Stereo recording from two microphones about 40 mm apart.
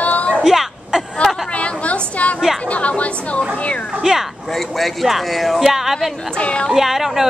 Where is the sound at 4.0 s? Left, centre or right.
Centre.